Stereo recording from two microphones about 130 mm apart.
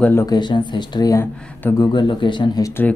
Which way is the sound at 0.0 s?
20° left (ahead or behind).